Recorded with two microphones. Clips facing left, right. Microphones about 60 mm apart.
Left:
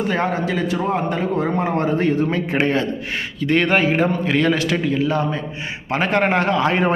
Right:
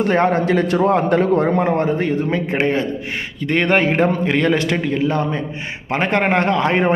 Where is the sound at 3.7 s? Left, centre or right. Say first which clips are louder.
Right 2 dB; right.